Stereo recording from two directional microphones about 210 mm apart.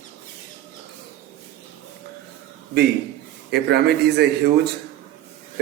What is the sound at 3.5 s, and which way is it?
Speech, 50° right (ahead or behind).